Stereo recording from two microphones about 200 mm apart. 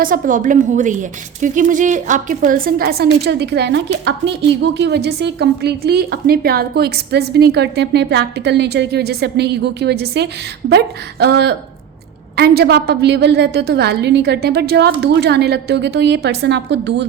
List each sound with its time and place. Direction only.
0.0 s a woman's voice: 45° right (ahead or behind); by 17.1 s 60° right (ahead or behind)